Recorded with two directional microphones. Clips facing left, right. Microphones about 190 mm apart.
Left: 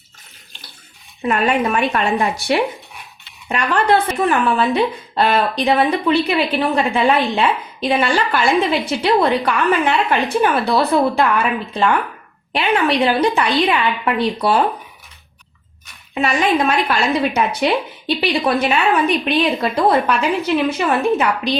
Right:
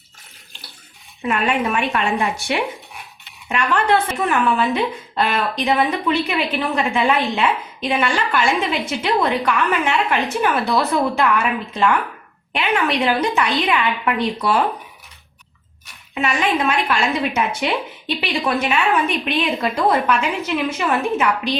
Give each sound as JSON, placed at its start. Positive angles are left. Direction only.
{"t": 1.2, "sound": "speech", "side_deg": 40}
{"t": 16.1, "sound": "speech", "side_deg": 35}